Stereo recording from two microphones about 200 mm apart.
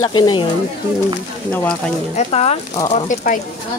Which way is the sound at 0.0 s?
20° left (ahead or behind).